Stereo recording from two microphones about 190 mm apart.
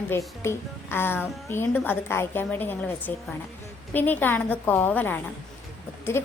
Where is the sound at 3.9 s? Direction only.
10° left (ahead or behind).